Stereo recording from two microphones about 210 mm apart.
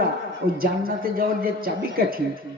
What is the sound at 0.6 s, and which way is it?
A man's voice, 45° right (ahead or behind).